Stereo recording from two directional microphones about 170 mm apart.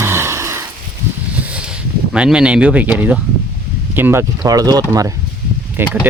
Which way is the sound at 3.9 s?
15° right (ahead or behind).